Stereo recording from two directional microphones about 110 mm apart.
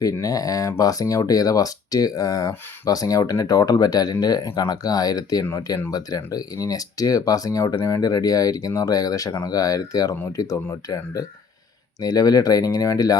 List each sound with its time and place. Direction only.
0.0 s speech: 35° left (ahead or behind)